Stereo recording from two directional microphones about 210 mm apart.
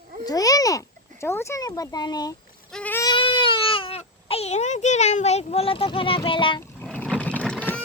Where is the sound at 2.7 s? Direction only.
10° left (ahead or behind); by 6.6 s 25° left (ahead or behind).